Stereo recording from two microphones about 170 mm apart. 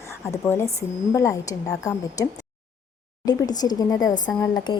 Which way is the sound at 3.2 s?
20° left (ahead or behind).